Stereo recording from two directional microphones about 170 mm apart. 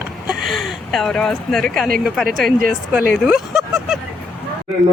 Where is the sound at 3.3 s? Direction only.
5° right (ahead or behind).